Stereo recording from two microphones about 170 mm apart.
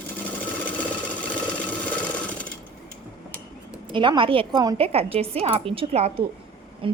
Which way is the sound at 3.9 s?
30° right (ahead or behind).